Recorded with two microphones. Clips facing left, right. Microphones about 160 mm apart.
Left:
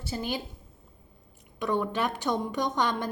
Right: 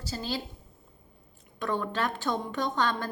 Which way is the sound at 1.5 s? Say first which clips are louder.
Left 2 dB; 10° left (ahead or behind).